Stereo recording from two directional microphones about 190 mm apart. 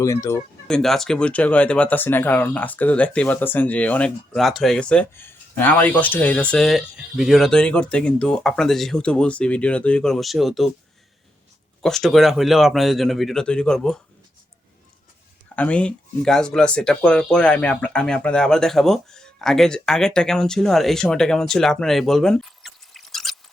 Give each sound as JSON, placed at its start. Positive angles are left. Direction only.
{"t": 0.0, "sound": "speech", "side_deg": 15}
{"t": 0.7, "sound": "speech", "side_deg": 0}
{"t": 11.8, "sound": "speech", "side_deg": 0}
{"t": 15.5, "sound": "speech", "side_deg": 5}